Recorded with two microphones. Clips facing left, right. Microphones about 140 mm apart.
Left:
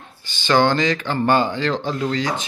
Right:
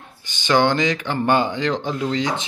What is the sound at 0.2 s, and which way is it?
Speech, 15° right (ahead or behind).